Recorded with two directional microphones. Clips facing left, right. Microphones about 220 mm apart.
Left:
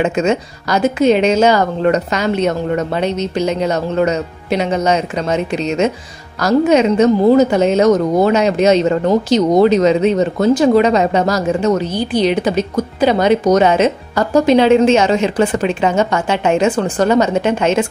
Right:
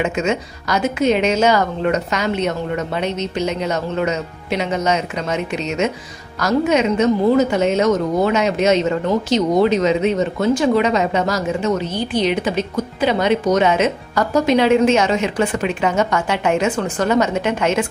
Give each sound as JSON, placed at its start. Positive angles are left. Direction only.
{"t": 0.0, "sound": "a woman's voice", "side_deg": 35}